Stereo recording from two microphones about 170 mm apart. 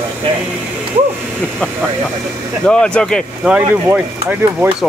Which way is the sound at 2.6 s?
5° left (ahead or behind).